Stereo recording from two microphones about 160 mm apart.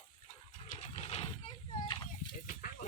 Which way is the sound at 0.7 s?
45° left (ahead or behind).